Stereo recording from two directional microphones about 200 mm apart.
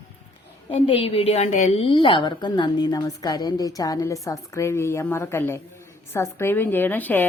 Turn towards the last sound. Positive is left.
turn(degrees=10)  # may be behind; listen again after turning